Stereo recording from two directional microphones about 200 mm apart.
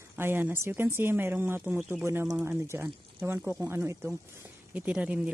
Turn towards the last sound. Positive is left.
turn(degrees=-5)  # may be behind; listen again after turning